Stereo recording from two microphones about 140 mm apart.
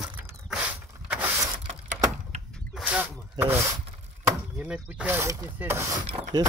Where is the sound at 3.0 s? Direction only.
15° right (ahead or behind).